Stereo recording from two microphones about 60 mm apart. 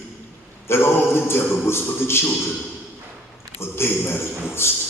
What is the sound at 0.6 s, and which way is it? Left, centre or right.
A man's voice, left.